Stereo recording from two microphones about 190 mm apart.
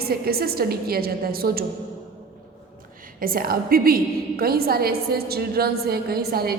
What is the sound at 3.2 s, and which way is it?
A woman's voice, 50° right (ahead or behind).